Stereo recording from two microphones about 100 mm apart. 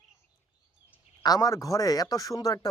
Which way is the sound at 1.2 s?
40° left (ahead or behind).